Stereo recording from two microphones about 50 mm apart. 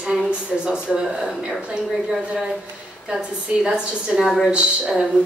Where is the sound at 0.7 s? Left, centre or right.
Centre.